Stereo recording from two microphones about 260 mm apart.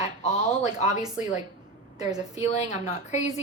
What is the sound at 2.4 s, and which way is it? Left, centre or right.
Speech, left.